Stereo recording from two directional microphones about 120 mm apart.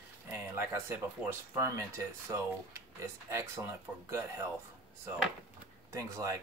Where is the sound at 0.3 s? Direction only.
20° right (ahead or behind).